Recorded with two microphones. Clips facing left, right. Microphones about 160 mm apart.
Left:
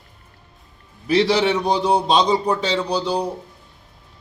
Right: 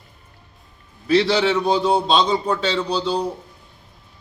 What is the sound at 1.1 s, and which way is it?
A man's voice, 15° left (ahead or behind).